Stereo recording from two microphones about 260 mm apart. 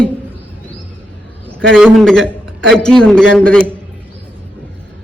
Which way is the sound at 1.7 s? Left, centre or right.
Centre.